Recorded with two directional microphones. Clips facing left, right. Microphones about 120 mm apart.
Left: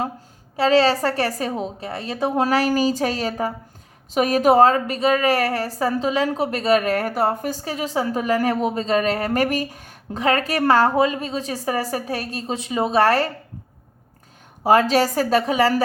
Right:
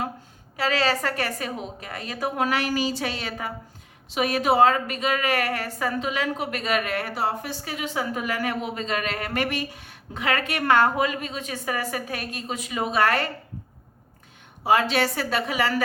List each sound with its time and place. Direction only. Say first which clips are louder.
0.5 s a woman's voice: left 7 dB; 30° left (ahead or behind)
14.6 s a woman's voice: left 5 dB; 40° left (ahead or behind)